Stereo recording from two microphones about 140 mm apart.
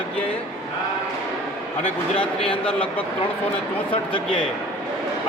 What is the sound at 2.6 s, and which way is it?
Speech, 10° left (ahead or behind).